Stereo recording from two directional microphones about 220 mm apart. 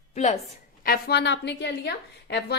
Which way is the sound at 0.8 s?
45° left (ahead or behind).